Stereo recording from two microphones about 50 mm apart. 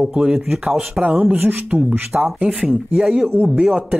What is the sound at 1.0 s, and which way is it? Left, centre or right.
Speech, right.